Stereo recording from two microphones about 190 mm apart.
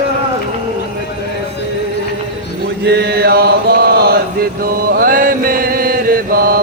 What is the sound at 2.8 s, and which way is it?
Chant, 60° right (ahead or behind).